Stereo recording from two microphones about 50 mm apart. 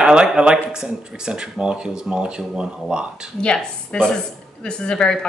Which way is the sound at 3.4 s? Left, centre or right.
Centre.